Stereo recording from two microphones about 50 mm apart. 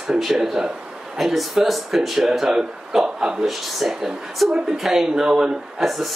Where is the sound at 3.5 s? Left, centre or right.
Centre.